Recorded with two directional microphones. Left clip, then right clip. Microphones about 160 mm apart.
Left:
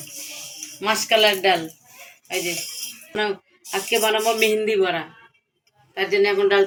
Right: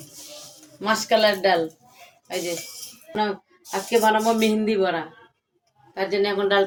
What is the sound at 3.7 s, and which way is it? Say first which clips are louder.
Speech: right 1 dB; 15° right (ahead or behind).